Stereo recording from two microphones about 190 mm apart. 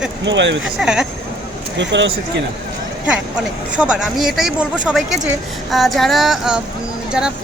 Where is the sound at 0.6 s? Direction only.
5° right (ahead or behind).